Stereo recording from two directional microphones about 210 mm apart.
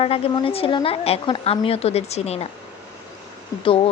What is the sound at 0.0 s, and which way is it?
A woman's voice, 25° left (ahead or behind).